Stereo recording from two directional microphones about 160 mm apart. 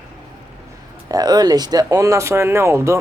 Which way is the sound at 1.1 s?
25° right (ahead or behind).